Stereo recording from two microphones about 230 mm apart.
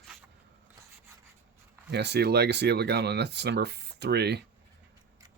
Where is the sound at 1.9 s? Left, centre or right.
Right.